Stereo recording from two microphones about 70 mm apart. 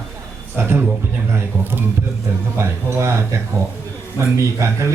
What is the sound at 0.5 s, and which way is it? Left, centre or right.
Speech, right.